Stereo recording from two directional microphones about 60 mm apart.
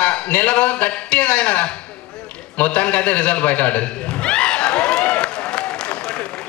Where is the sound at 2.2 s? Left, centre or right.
Left.